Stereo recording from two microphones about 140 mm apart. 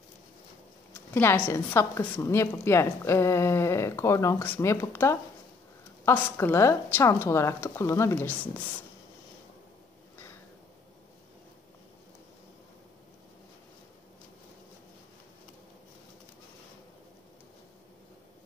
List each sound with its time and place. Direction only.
1.1 s a woman's voice: 15° left (ahead or behind)